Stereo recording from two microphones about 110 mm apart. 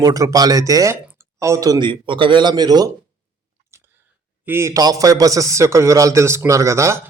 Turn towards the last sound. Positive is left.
turn(degrees=-25)  # may be behind; listen again after turning